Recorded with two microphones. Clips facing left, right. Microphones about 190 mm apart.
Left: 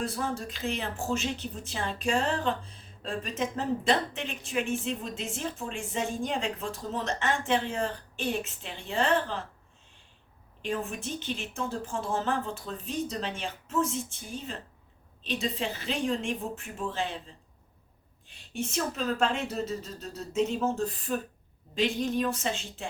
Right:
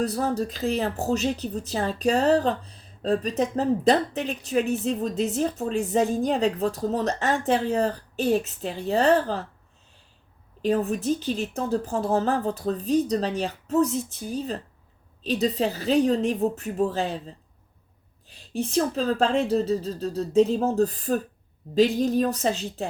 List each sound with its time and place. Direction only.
0.0 s speech: 40° right (ahead or behind)
10.6 s speech: 40° right (ahead or behind)
18.3 s speech: 35° right (ahead or behind)